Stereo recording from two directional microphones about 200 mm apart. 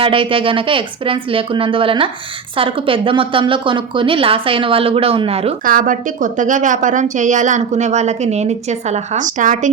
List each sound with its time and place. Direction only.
0.0 s a woman's voice: 25° right (ahead or behind)
5.6 s a woman's voice: 45° right (ahead or behind)